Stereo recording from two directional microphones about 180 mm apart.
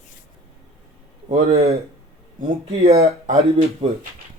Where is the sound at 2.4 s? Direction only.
35° right (ahead or behind).